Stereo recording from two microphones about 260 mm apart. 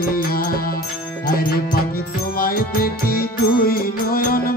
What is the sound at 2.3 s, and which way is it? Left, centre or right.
Music, left.